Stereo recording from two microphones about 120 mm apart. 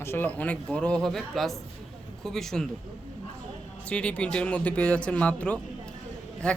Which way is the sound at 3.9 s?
10° left (ahead or behind).